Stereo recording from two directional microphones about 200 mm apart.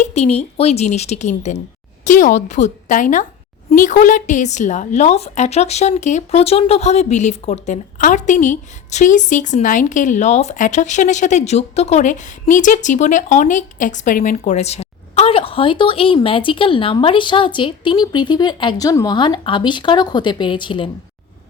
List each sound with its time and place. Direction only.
0.0 s speech: 35° left (ahead or behind)